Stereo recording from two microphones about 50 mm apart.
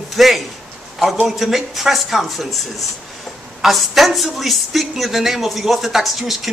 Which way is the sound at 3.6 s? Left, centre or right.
Centre.